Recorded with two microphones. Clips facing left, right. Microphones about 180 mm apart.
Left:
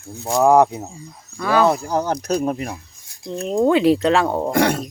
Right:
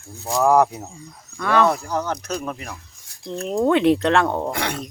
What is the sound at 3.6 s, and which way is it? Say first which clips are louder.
Speech: left 2 dB; 5° left (ahead or behind).